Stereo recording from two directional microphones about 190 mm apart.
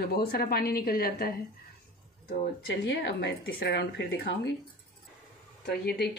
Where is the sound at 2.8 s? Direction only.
65° left (ahead or behind).